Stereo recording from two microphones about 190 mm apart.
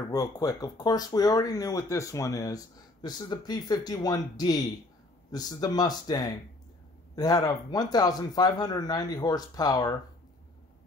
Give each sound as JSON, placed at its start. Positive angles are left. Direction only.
{"t": 0.1, "sound": "speech", "side_deg": 20}